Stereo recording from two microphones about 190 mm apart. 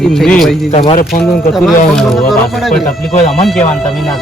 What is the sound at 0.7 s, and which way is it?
Speech, 35° left (ahead or behind).